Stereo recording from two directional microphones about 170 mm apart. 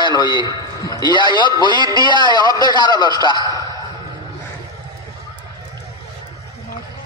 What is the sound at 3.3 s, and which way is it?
Speech, 20° right (ahead or behind).